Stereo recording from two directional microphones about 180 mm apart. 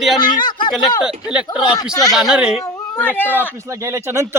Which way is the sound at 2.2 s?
5° right (ahead or behind).